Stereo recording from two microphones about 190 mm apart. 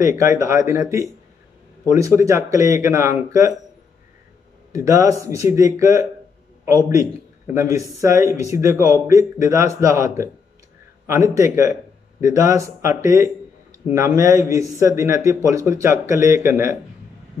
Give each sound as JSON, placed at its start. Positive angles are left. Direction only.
{"t": 0.0, "sound": "speech", "side_deg": -15}
{"t": 1.9, "sound": "speech", "side_deg": -15}
{"t": 4.7, "sound": "speech", "side_deg": -15}
{"t": 11.3, "sound": "speech", "side_deg": -15}